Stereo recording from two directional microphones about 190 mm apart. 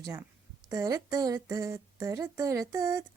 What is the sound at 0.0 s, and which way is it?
A woman's voice, 15° right (ahead or behind).